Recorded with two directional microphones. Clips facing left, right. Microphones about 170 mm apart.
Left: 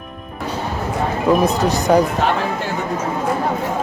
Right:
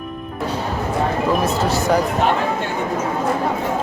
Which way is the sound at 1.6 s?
15° left (ahead or behind).